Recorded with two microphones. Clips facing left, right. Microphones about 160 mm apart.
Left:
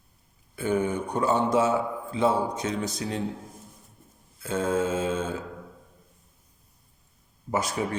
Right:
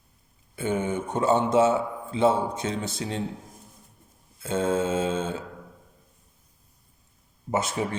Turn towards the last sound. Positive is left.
turn(degrees=-25)  # may be behind; listen again after turning